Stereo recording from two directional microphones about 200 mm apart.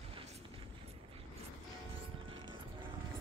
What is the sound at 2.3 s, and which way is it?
Music, 25° right (ahead or behind).